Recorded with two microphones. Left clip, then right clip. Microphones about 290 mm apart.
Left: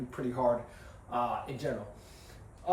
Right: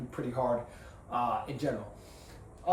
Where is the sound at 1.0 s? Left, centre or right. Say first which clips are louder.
Right 1 dB; centre.